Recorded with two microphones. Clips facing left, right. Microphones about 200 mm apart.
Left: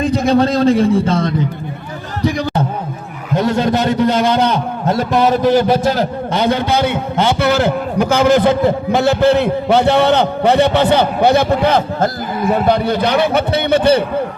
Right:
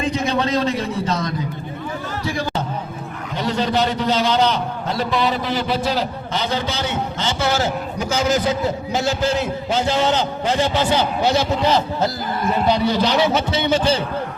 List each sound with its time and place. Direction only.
0.1 s a man's voice: 35° left (ahead or behind)
3.3 s a man's voice: 50° left (ahead or behind)